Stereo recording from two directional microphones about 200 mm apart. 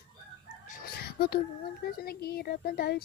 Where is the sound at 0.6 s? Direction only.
45° left (ahead or behind).